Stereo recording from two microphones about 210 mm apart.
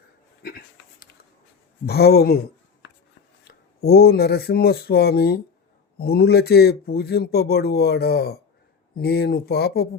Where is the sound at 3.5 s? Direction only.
50° left (ahead or behind).